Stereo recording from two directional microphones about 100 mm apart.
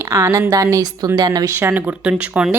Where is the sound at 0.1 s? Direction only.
25° right (ahead or behind).